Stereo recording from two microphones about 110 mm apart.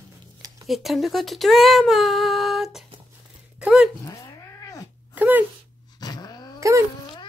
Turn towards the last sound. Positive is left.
turn(degrees=-30)  # may be behind; listen again after turning